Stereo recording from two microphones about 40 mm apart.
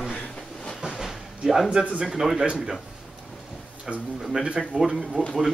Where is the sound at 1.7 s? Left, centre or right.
Centre.